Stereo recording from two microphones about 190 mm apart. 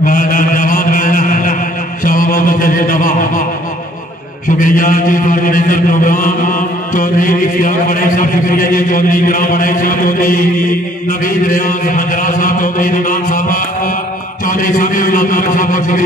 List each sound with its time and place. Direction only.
0.0 s mantra: 45° left (ahead or behind)
2.0 s music: 45° left (ahead or behind)
4.6 s a man's voice: 45° left (ahead or behind)